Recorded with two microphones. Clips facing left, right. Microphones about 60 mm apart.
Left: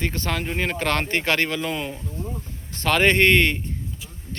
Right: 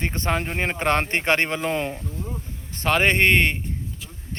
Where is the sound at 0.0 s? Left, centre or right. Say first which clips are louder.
Right 1 dB; right.